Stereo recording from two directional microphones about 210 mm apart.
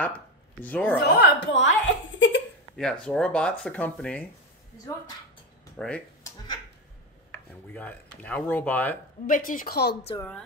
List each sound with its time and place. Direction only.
0.0 s speech: 5° left (ahead or behind)
1.1 s a woman's voice: 55° left (ahead or behind)
2.1 s a sound: 60° left (ahead or behind)
2.8 s speech: 5° left (ahead or behind)
7.2 s speech: 10° left (ahead or behind)
9.2 s speech: 40° left (ahead or behind)
10.1 s speech: 10° left (ahead or behind)